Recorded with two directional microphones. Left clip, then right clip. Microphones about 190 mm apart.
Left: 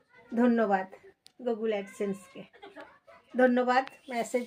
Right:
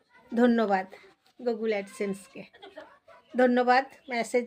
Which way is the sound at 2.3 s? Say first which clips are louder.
Right 2 dB; 10° right (ahead or behind).